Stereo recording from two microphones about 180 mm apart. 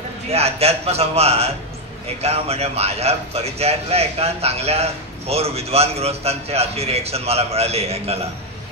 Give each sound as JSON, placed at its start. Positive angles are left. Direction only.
{"t": 0.3, "sound": "a man's voice", "side_deg": -35}